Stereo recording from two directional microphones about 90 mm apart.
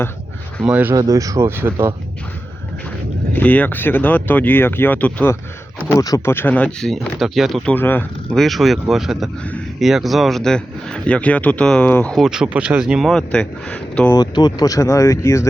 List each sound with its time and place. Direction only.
0.6 s speech: 15° right (ahead or behind)
0.9 s speech: 40° right (ahead or behind)
1.5 s speech: 25° right (ahead or behind)
3.3 s speech: 20° left (ahead or behind)
5.9 s speech: 35° left (ahead or behind)
6.2 s speech: 25° left (ahead or behind); by 7.6 s 5° right (ahead or behind)
7.8 s speech: 20° left (ahead or behind)
8.3 s speech: centre (ahead or behind)
12.1 s speech: 5° right (ahead or behind)
13.1 s speech: 10° left (ahead or behind)
14.1 s speech: 50° left (ahead or behind); by 15.4 s 30° left (ahead or behind)